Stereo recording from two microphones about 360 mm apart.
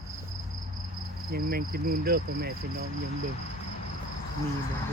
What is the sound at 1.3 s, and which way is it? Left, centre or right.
Speech, right.